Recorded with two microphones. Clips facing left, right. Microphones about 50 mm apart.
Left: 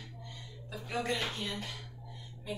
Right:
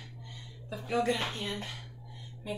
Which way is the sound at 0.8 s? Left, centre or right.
Centre.